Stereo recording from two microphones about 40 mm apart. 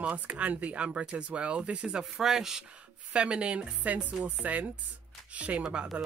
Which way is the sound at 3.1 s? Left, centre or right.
Right.